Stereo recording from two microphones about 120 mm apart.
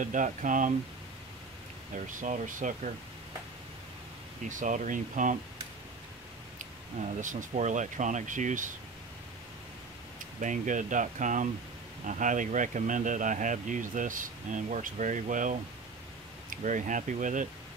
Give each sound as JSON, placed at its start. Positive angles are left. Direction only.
{"t": 0.0, "sound": "speech", "side_deg": -90}
{"t": 2.0, "sound": "speech", "side_deg": -90}
{"t": 4.5, "sound": "speech", "side_deg": -90}
{"t": 7.0, "sound": "speech", "side_deg": -90}
{"t": 10.4, "sound": "speech", "side_deg": -90}